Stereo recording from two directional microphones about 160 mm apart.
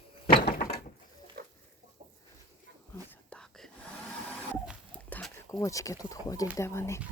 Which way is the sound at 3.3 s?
5° left (ahead or behind).